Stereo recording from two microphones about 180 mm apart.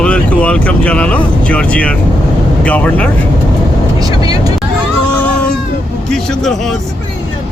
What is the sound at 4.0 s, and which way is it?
Vehicle, 20° right (ahead or behind).